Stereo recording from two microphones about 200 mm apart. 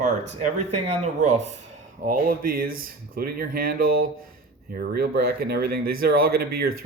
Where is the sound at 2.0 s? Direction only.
45° right (ahead or behind).